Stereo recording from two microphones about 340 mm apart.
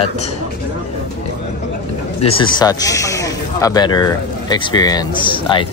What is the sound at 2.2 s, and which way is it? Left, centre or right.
Speech, centre.